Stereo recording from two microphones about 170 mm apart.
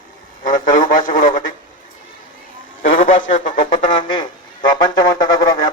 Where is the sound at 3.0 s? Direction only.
50° left (ahead or behind).